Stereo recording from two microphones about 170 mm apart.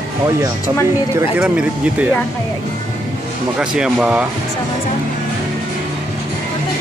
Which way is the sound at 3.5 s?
5° right (ahead or behind).